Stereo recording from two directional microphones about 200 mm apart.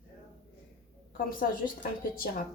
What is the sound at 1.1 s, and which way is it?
Speech, 45° left (ahead or behind).